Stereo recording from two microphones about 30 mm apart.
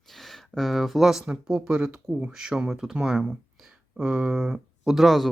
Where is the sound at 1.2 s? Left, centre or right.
Right.